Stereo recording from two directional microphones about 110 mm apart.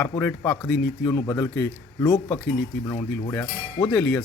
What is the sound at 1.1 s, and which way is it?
Speech, 30° left (ahead or behind).